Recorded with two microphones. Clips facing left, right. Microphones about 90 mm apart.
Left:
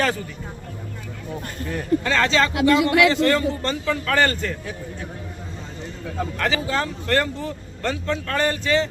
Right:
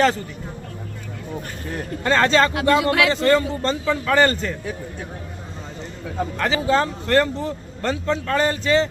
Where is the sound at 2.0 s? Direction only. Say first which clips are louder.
Right 6 dB; 35° right (ahead or behind).